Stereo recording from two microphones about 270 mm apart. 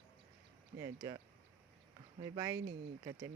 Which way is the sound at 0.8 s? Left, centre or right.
Centre.